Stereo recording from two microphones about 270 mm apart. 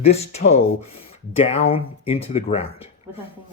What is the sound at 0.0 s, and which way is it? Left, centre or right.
Speech, left.